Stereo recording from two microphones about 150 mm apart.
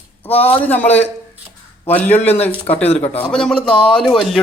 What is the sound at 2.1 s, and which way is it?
Speech, 45° left (ahead or behind).